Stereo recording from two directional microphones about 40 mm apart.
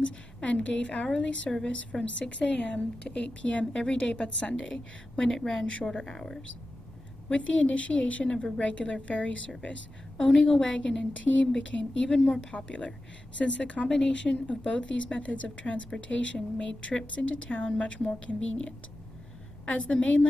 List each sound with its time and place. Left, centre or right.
0.0 s speech: left
3.7 s a woman's voice: left
7.2 s speech: left
10.1 s a woman's voice: centre
11.2 s a woman's voice: left